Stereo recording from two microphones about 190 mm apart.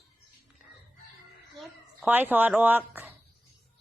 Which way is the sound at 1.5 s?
5° right (ahead or behind).